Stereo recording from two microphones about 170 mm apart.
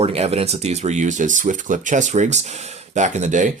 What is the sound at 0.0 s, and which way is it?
Speech, 35° right (ahead or behind).